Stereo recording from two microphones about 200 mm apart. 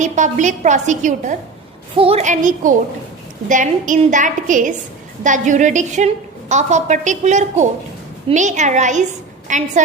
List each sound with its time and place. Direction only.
0.0 s a woman's voice: 40° right (ahead or behind)